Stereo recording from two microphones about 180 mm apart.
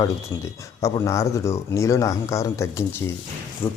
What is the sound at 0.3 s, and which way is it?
Speech, 15° left (ahead or behind).